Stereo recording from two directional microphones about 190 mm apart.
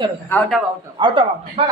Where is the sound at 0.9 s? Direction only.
25° right (ahead or behind).